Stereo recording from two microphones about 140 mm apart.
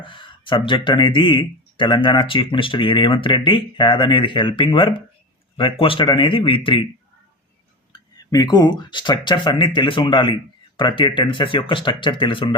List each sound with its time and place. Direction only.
0.0 s speech: 35° left (ahead or behind)
8.3 s speech: 30° left (ahead or behind)